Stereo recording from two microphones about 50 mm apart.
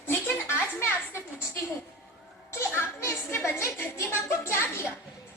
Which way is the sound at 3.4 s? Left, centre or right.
Left.